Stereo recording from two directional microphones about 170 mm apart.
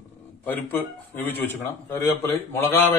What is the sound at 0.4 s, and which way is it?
A man's voice, 10° left (ahead or behind).